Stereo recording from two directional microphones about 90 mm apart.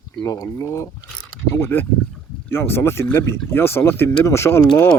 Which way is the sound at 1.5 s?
25° left (ahead or behind).